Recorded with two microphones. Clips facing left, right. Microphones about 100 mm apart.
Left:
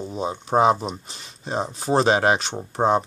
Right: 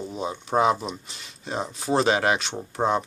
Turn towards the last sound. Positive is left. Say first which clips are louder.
# left 4 dB
turn(degrees=35)  # may be behind; listen again after turning